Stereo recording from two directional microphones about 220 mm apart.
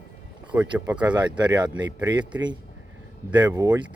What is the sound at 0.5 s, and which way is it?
Speech, 10° right (ahead or behind).